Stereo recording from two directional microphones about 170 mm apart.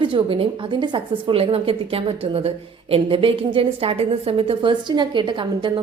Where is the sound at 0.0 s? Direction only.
30° right (ahead or behind).